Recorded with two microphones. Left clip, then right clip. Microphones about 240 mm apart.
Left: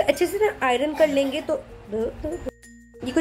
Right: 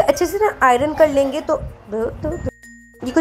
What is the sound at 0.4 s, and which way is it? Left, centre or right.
A woman's voice, centre.